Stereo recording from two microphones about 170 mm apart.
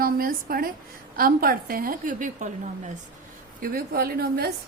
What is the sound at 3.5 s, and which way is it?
Speech, 60° right (ahead or behind).